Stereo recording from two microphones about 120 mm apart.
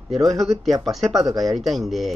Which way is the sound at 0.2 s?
Centre (ahead or behind).